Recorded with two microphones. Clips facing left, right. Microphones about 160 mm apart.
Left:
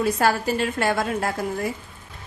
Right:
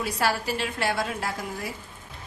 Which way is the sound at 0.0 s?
50° left (ahead or behind).